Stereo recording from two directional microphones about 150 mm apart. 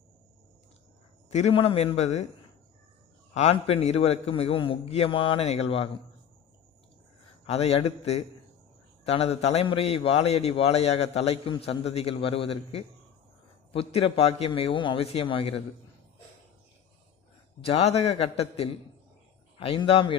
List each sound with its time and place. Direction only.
1.3 s a man's voice: 45° left (ahead or behind)
3.3 s a man's voice: 45° left (ahead or behind)
7.4 s a man's voice: 40° left (ahead or behind)
17.6 s a man's voice: 40° left (ahead or behind)